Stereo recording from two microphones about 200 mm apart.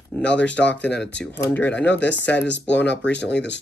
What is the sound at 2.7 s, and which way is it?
Speech, 60° left (ahead or behind).